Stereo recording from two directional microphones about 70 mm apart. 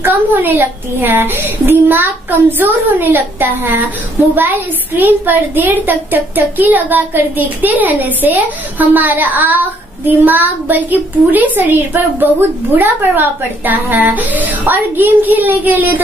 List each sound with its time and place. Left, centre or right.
0.0 s a woman's voice: right